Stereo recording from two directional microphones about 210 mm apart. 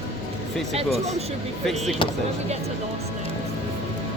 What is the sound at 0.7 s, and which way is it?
Speech, 30° right (ahead or behind).